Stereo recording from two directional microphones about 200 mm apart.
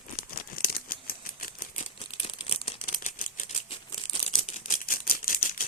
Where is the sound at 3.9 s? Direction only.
30° left (ahead or behind); by 5.6 s 45° left (ahead or behind).